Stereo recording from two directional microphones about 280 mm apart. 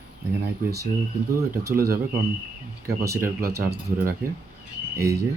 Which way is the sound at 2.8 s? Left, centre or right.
Centre.